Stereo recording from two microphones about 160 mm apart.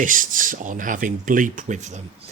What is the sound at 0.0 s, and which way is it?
Speech, 55° right (ahead or behind).